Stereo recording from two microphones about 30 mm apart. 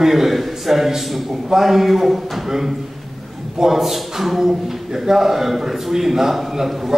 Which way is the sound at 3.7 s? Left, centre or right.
Centre.